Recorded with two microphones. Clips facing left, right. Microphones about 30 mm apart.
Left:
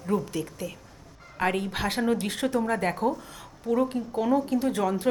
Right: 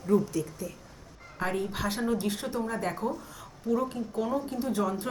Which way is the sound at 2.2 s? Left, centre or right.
Left.